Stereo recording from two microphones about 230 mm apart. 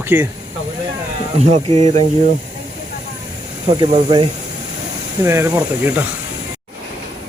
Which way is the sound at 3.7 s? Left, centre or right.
Right.